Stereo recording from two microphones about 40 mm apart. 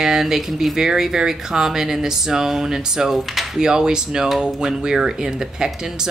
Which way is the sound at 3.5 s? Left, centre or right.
Centre.